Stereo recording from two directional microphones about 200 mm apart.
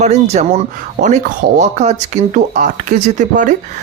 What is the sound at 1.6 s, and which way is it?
Speech, 35° right (ahead or behind).